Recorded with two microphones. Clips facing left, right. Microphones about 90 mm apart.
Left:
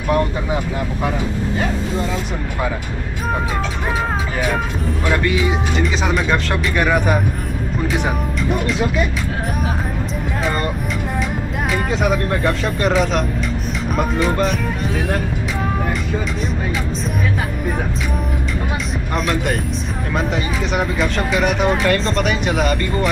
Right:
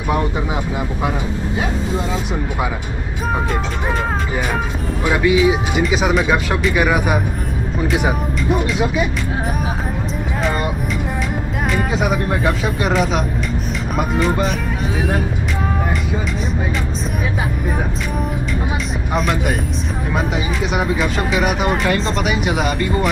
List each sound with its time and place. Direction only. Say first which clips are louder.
5.0 s speech: right 5 dB; 10° right (ahead or behind)
11.7 s speech: even; 5° right (ahead or behind)
19.1 s speech: right 1 dB; centre (ahead or behind)